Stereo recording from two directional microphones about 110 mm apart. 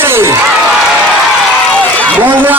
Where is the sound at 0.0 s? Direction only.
20° right (ahead or behind).